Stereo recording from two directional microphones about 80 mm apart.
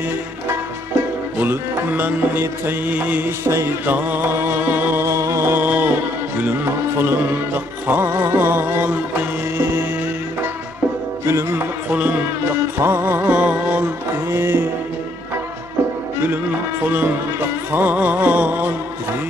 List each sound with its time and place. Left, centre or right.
1.4 s music: right
3.4 s music: right
3.8 s music: right
5.0 s music: right
11.2 s music: right
11.9 s music: centre
12.8 s music: right
14.3 s music: right
16.8 s music: right